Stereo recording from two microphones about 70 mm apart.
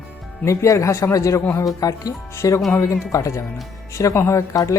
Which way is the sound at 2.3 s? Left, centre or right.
Left.